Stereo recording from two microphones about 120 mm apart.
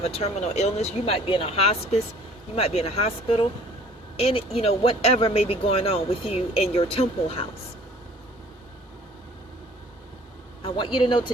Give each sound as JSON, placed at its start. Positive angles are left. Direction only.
{"t": 0.0, "sound": "speech", "side_deg": 60}
{"t": 10.6, "sound": "speech", "side_deg": 45}